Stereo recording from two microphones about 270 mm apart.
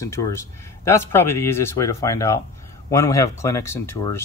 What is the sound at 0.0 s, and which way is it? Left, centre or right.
Speech, centre.